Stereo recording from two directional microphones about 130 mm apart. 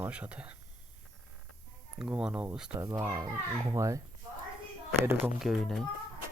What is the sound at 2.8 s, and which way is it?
Speech, 25° right (ahead or behind).